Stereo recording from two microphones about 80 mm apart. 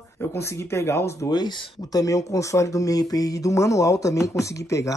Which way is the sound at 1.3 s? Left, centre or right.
Left.